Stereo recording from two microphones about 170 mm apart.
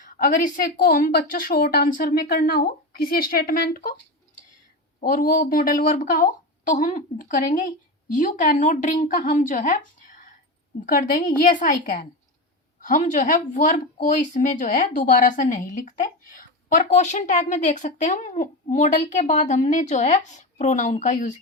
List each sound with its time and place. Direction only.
0.0 s a woman's voice: 55° left (ahead or behind)
4.9 s speech: 55° left (ahead or behind)